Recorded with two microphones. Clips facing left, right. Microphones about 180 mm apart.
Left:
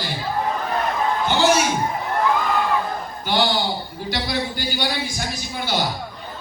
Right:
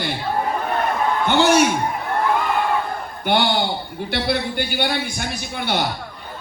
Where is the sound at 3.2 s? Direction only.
60° right (ahead or behind).